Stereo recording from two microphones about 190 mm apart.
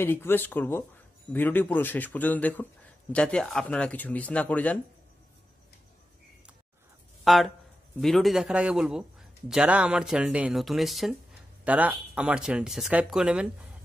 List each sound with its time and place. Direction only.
0.0 s a man's voice: 10° left (ahead or behind)
7.2 s a man's voice: centre (ahead or behind)